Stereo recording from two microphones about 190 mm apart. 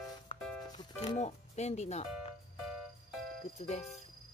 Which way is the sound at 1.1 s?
35° left (ahead or behind).